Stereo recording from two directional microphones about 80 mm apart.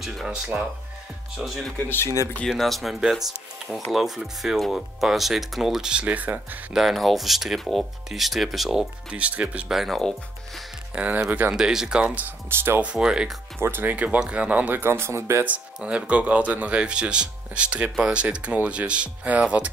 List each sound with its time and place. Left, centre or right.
0.0 s speech: centre
6.7 s speech: centre
9.1 s speech: centre
9.8 s speech: centre
11.2 s speech: right
11.5 s speech: centre
12.4 s speech: right
12.8 s speech: centre
13.6 s speech: right
14.8 s speech: right
15.4 s speech: centre